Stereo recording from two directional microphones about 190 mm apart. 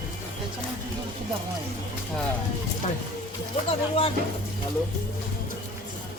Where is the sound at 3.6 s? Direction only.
30° left (ahead or behind).